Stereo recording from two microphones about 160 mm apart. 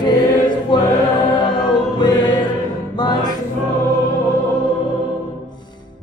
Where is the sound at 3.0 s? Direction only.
25° left (ahead or behind).